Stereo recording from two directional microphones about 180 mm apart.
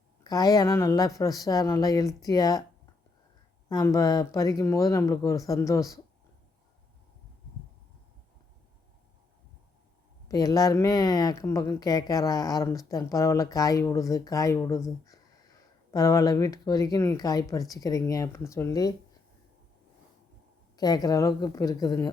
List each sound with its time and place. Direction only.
0.3 s speech: 20° left (ahead or behind)
3.7 s speech: 20° left (ahead or behind)
10.2 s speech: 20° left (ahead or behind)
20.7 s speech: 20° left (ahead or behind)